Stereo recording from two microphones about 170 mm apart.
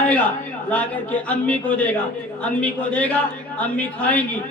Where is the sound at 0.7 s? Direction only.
10° left (ahead or behind).